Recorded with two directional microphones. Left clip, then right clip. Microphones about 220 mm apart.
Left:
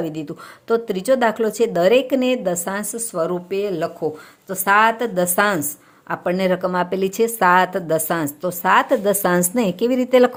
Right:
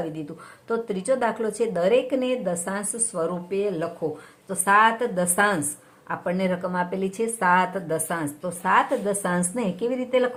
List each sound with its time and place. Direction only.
0.7 s a woman's voice: 40° left (ahead or behind)